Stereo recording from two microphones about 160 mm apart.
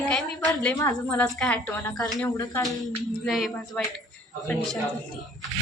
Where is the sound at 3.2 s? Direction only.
Centre (ahead or behind).